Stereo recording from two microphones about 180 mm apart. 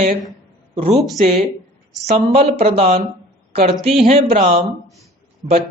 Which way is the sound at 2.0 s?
35° right (ahead or behind).